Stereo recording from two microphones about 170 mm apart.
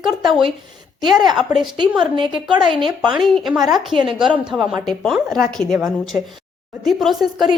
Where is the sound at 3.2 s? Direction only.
Centre (ahead or behind).